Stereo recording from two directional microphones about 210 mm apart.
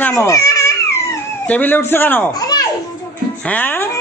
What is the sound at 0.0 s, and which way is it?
Cat, 10° left (ahead or behind).